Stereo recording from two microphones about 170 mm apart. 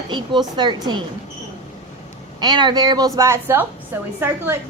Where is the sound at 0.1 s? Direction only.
25° right (ahead or behind).